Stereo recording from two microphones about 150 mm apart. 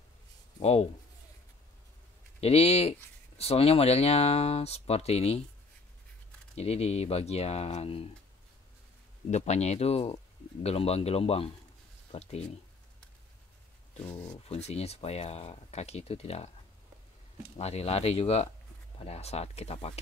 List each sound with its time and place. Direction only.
0.6 s speech: 45° left (ahead or behind)
2.4 s speech: 45° left (ahead or behind)
6.5 s speech: 45° left (ahead or behind)
9.3 s speech: 45° left (ahead or behind)
13.9 s speech: 35° left (ahead or behind)
17.6 s speech: 45° left (ahead or behind)